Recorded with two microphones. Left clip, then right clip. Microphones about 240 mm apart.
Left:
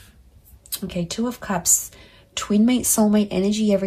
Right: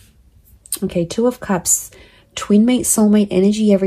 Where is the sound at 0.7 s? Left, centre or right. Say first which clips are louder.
Right 8 dB; right.